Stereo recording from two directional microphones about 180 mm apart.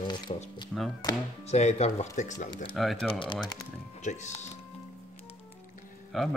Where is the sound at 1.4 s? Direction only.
35° left (ahead or behind).